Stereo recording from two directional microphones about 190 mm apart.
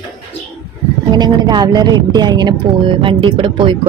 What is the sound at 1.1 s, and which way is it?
A woman's voice, 20° right (ahead or behind).